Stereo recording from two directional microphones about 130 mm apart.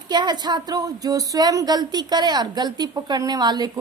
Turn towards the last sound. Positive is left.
turn(degrees=-30)  # may be behind; listen again after turning